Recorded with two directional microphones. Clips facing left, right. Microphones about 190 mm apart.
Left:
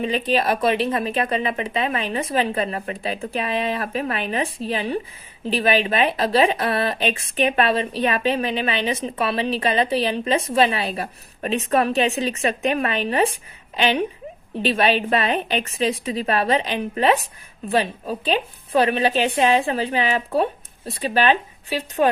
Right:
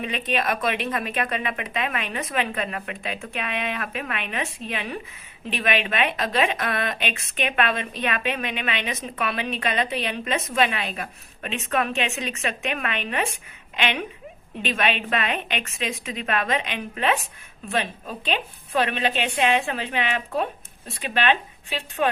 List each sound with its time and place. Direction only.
0.0 s speech: 30° left (ahead or behind)